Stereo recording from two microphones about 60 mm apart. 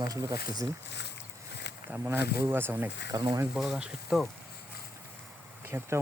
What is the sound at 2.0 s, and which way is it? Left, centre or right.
Speech, right.